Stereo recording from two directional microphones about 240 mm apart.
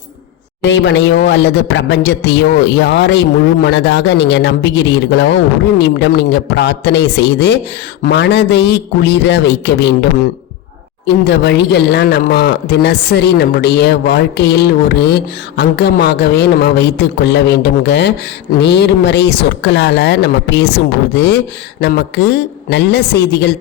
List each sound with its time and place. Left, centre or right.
0.6 s speech: left